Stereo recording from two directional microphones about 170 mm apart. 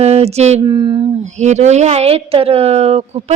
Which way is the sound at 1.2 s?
45° right (ahead or behind).